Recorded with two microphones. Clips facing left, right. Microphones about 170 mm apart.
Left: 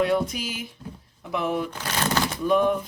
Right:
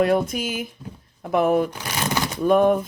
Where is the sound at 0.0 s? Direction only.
50° right (ahead or behind).